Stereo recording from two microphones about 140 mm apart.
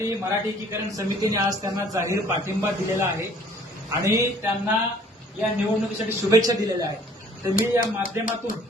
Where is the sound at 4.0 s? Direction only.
25° right (ahead or behind).